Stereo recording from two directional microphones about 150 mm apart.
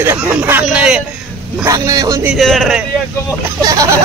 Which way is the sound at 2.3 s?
Centre (ahead or behind).